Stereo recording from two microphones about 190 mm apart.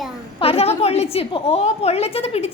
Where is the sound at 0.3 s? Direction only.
30° left (ahead or behind).